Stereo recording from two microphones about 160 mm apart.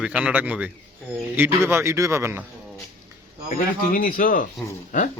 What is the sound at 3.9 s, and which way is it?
Speech, 60° left (ahead or behind).